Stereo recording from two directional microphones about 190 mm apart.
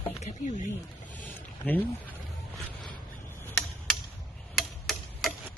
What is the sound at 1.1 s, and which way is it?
Speech, 10° left (ahead or behind).